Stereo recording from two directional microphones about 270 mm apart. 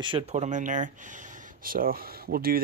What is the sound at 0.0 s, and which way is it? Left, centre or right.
Speech, right.